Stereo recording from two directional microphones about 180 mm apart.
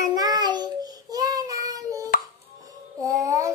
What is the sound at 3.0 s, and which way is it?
Child singing, 20° right (ahead or behind).